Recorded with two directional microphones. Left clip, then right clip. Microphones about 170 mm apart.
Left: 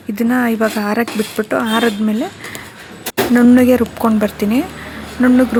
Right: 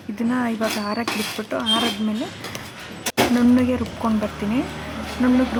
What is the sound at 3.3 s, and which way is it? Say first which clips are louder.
Speech: left 9 dB; 30° left (ahead or behind).